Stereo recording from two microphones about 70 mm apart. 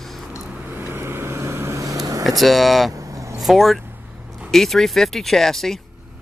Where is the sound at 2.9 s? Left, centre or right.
Right.